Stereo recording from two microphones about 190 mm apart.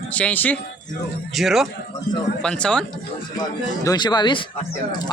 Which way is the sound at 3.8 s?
20° left (ahead or behind).